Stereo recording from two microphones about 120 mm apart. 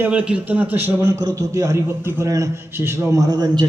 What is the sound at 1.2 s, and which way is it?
A man's voice, 30° right (ahead or behind).